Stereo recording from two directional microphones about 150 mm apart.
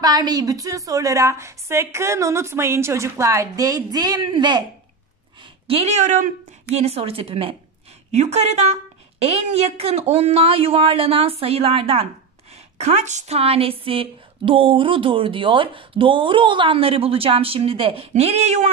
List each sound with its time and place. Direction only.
0.0 s a woman's voice: 25° right (ahead or behind); by 18.7 s 50° right (ahead or behind)